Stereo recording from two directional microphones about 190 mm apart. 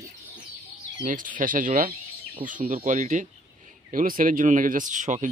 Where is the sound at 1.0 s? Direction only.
45° right (ahead or behind).